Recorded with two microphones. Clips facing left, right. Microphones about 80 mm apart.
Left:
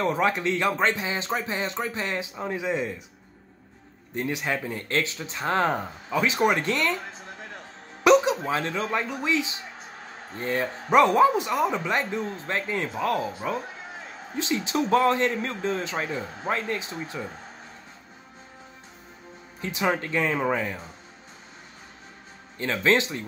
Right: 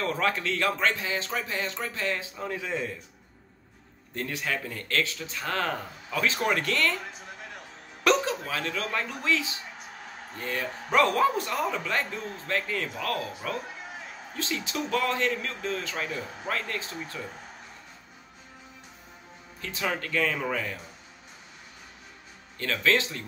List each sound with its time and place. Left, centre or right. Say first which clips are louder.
0.0 s speech: left 4 dB; centre
4.1 s speech: left 4 dB; centre
8.0 s music: left 6 dB; centre
8.4 s speech: left 5 dB; left
10.3 s speech: left 5 dB; left
19.6 s speech: left 5 dB; left
22.6 s speech: left 3 dB; left